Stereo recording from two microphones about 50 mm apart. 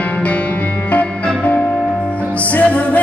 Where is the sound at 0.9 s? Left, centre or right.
Left.